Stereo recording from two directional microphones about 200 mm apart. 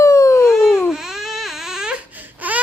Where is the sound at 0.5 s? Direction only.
Centre (ahead or behind).